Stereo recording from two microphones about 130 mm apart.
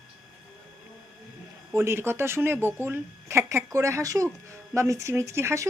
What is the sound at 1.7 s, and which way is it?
Speech, 20° right (ahead or behind).